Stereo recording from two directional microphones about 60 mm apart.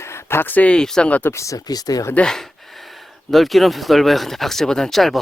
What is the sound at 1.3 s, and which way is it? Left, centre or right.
Speech, left.